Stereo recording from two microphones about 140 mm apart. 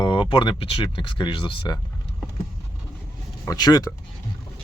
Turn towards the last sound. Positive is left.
turn(degrees=30)  # may be behind; listen again after turning